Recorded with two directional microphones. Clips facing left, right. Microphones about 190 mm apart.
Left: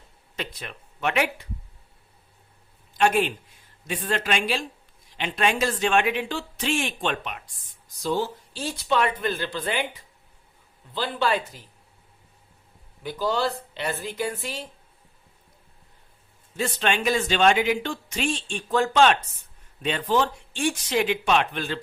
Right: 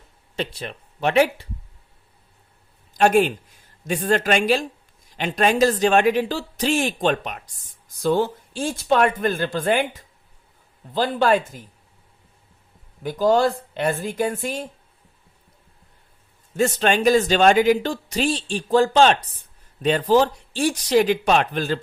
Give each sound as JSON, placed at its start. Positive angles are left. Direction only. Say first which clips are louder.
{"t": 0.3, "sound": "speech", "louder": "right 6 dB", "side_deg": -30}
{"t": 2.9, "sound": "speech", "louder": "right 5 dB", "side_deg": -40}
{"t": 8.0, "sound": "speech", "louder": "right 6 dB", "side_deg": -55}
{"t": 13.0, "sound": "speech", "louder": "right 7 dB", "side_deg": -45}
{"t": 16.6, "sound": "speech", "louder": "right 6 dB", "side_deg": -45}